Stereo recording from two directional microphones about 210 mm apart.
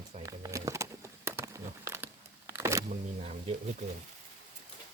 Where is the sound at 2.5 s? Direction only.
15° right (ahead or behind).